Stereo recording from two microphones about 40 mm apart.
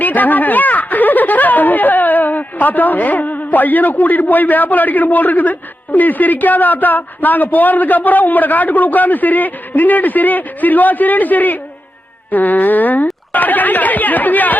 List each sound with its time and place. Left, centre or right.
0.0 s speech: left